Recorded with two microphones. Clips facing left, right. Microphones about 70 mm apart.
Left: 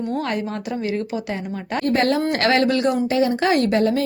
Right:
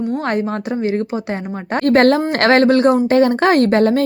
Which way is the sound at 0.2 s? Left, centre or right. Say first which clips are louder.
Right 5 dB; right.